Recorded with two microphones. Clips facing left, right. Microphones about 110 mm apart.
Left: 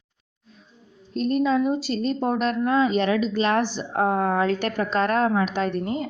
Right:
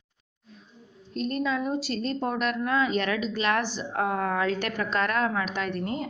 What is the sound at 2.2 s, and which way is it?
A woman's voice, 25° left (ahead or behind).